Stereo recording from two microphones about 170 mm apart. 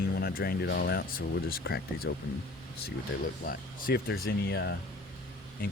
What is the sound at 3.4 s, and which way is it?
Speech, 55° left (ahead or behind).